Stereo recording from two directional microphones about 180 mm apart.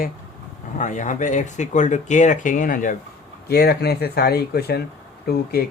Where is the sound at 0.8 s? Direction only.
45° left (ahead or behind).